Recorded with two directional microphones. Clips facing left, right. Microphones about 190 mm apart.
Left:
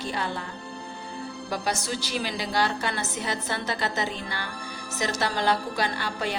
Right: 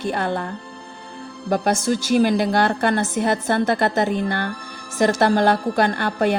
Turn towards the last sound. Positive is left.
turn(degrees=-55)  # may be behind; listen again after turning